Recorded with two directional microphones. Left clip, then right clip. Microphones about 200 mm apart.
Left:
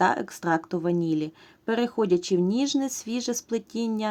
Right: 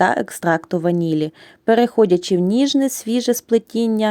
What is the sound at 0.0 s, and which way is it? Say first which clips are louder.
Speech: right 7 dB; 30° right (ahead or behind).